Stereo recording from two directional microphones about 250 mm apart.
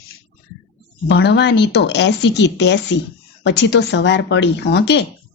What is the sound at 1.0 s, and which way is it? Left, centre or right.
A woman's voice, left.